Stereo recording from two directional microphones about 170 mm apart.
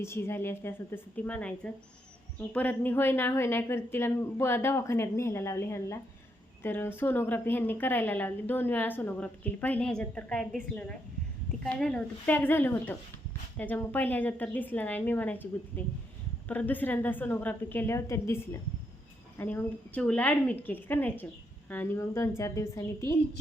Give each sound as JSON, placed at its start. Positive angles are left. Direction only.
{"t": 0.0, "sound": "a woman's voice", "side_deg": 15}